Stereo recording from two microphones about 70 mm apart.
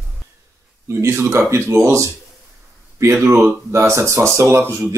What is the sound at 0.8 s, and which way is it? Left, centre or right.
Speech, right.